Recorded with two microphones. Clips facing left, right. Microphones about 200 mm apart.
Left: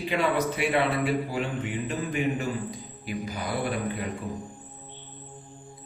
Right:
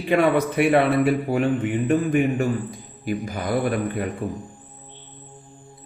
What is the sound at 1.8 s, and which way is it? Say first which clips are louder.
Speech: right 9 dB; 55° right (ahead or behind).